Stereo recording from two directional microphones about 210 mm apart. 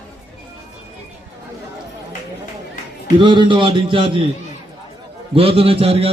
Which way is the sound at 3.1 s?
25° right (ahead or behind).